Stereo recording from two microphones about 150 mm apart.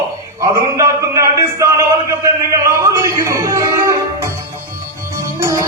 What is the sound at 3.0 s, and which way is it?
Speech, 20° right (ahead or behind).